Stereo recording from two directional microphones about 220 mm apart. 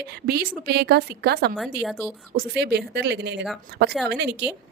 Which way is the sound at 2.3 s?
45° right (ahead or behind).